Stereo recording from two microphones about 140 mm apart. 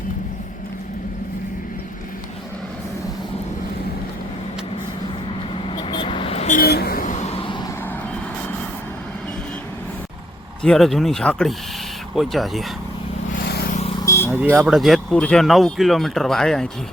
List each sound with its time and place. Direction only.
5.6 s vehicle: 35° left (ahead or behind)
6.6 s vehicle: 90° left; by 7.5 s 45° left (ahead or behind)
10.6 s speech: 5° left (ahead or behind)
14.0 s vehicle: 20° left (ahead or behind)
14.3 s speech: 15° right (ahead or behind)
14.8 s speech: centre (ahead or behind)